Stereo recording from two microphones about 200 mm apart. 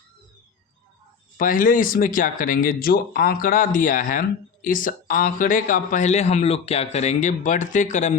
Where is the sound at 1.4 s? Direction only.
45° left (ahead or behind).